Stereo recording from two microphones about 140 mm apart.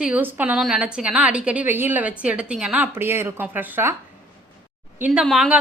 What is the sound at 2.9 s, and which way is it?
A woman's voice, 15° right (ahead or behind).